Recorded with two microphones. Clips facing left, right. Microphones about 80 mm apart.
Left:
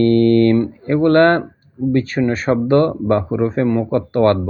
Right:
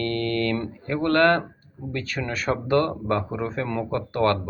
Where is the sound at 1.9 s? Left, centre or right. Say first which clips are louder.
Left 11 dB; left.